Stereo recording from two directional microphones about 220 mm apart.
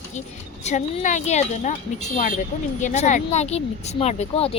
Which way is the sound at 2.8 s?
30° left (ahead or behind).